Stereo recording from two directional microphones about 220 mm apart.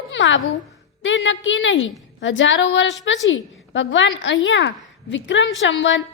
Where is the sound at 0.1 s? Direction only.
55° left (ahead or behind).